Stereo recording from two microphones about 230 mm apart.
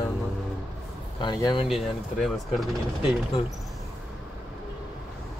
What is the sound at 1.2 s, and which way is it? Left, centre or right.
Speech, left.